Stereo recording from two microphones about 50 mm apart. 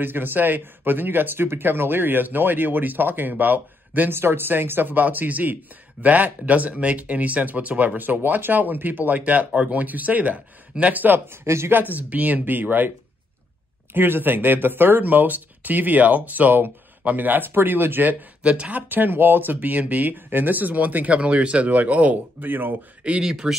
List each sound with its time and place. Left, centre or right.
0.0 s speech: right
4.1 s speech: right
11.2 s speech: right
11.7 s speech: right
13.9 s speech: right
18.4 s speech: right
23.2 s speech: centre